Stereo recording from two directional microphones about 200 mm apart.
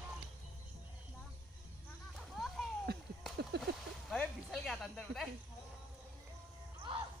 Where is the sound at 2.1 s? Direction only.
Centre (ahead or behind).